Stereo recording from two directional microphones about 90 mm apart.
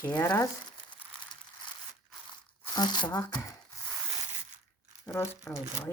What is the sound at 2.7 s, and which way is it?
Speech, 50° left (ahead or behind).